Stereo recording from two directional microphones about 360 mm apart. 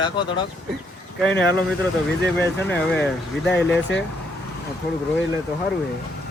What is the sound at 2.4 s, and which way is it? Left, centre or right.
Speech, centre.